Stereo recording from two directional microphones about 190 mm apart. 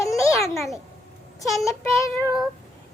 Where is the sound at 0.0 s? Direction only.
15° left (ahead or behind).